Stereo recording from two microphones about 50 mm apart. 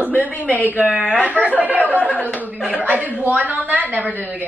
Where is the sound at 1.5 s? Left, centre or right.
Right.